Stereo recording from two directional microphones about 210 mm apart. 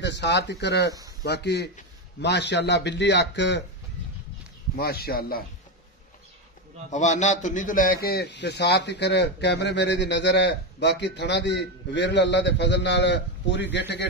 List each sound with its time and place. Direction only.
0.0 s a man's voice: 55° left (ahead or behind)
4.7 s speech: 50° left (ahead or behind)
6.9 s a man's voice: 35° left (ahead or behind); by 14.0 s 55° left (ahead or behind)